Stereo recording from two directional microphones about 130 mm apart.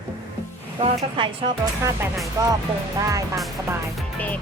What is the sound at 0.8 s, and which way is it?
Speech, 40° right (ahead or behind).